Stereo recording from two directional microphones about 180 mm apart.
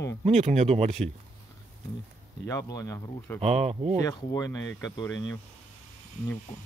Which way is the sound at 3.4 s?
40° right (ahead or behind).